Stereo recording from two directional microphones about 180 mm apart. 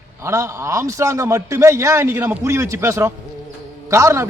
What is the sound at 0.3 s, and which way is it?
A man's voice, 15° right (ahead or behind).